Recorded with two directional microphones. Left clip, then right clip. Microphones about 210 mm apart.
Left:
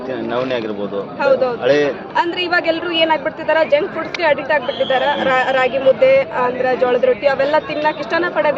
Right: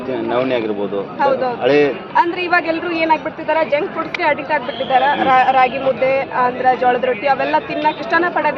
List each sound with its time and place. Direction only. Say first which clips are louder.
0.3 s speech: right 2 dB; 35° right (ahead or behind)
1.2 s a man's voice: left 2 dB; 5° left (ahead or behind)
1.6 s a man's voice: right 3 dB; 35° right (ahead or behind)
2.1 s a man's voice: right 2 dB; 5° left (ahead or behind)